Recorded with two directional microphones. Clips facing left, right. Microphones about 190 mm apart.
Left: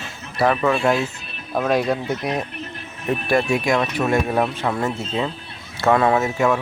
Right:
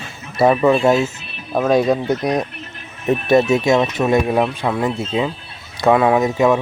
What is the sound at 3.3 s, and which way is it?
Speech, 20° right (ahead or behind).